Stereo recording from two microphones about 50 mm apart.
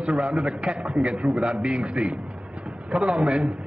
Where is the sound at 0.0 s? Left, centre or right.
Centre.